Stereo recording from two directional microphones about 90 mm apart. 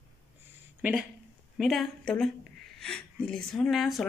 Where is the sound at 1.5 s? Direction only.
Centre (ahead or behind).